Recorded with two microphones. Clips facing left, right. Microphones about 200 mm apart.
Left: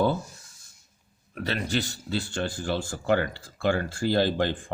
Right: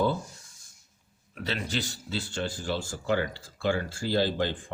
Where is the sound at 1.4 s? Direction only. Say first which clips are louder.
Left 4 dB; 50° left (ahead or behind).